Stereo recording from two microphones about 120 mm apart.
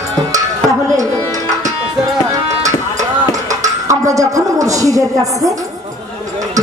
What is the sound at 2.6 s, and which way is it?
Music, 30° right (ahead or behind).